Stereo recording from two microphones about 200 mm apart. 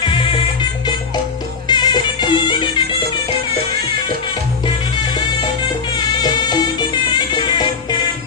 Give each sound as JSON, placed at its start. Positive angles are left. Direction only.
{"t": 0.0, "sound": "music", "side_deg": 25}
{"t": 1.6, "sound": "music", "side_deg": 20}
{"t": 4.6, "sound": "music", "side_deg": 20}